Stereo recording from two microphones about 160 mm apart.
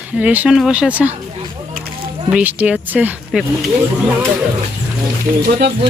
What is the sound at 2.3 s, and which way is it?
Speech, 10° right (ahead or behind).